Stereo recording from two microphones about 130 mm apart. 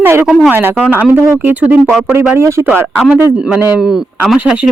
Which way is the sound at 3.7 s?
Centre (ahead or behind).